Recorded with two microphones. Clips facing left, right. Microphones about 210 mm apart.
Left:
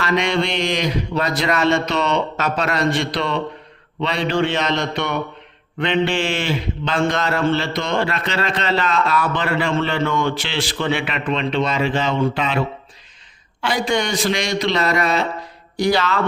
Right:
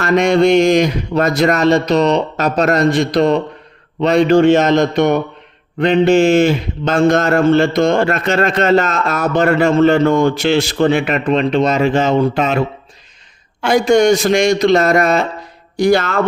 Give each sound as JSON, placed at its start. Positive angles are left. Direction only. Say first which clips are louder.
{"t": 0.0, "sound": "a man's voice", "louder": "right 8 dB", "side_deg": -45}